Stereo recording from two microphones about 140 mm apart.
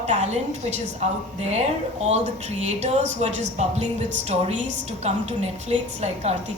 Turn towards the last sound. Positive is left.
turn(degrees=-50)  # may be behind; listen again after turning